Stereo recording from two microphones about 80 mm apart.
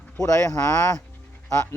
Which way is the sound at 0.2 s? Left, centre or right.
Left.